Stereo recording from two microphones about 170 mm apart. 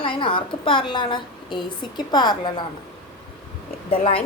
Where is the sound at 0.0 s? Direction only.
30° left (ahead or behind).